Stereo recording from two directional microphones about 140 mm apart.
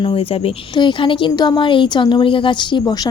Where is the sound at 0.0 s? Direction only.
40° left (ahead or behind).